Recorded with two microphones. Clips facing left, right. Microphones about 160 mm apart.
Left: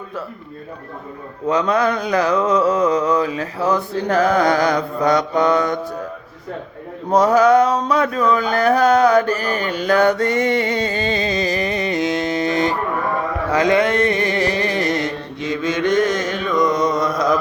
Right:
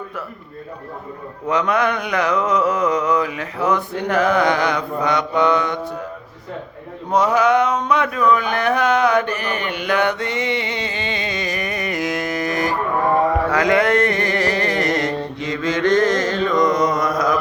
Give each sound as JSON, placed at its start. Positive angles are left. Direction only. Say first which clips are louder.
{"t": 1.5, "sound": "mantra", "louder": "left 2 dB", "side_deg": 30}
{"t": 7.1, "sound": "carnatic music", "louder": "left 3 dB", "side_deg": 40}
{"t": 13.5, "sound": "a sound", "louder": "left 5 dB", "side_deg": 25}